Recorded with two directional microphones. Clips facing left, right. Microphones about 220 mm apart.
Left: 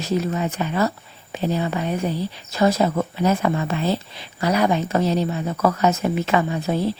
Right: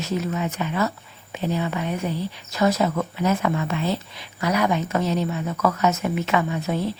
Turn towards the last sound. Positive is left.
turn(degrees=35)  # may be behind; listen again after turning